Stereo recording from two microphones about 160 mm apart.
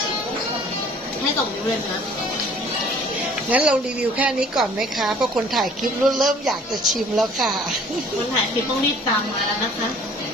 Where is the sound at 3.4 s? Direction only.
10° right (ahead or behind).